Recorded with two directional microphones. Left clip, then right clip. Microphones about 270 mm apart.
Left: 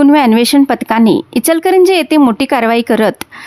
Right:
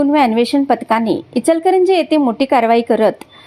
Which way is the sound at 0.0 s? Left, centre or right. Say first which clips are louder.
Left 4 dB; left.